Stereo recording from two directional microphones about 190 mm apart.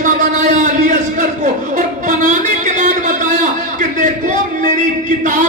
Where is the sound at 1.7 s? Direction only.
40° right (ahead or behind).